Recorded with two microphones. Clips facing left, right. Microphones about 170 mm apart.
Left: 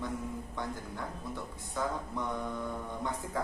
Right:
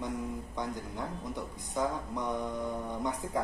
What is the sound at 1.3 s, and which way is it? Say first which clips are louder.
Speech: right 3 dB; 15° right (ahead or behind).